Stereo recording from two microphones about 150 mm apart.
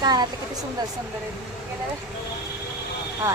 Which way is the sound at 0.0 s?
25° right (ahead or behind).